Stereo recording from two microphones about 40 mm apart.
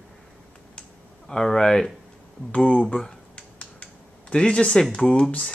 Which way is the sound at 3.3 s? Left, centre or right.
Left.